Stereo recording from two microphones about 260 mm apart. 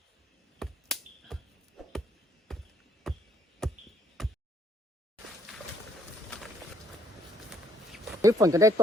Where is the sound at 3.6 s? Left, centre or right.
Centre.